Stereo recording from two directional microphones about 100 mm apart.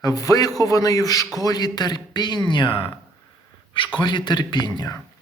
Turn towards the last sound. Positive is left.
turn(degrees=45)  # may be behind; listen again after turning